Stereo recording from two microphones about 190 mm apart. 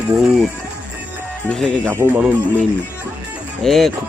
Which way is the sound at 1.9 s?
10° right (ahead or behind).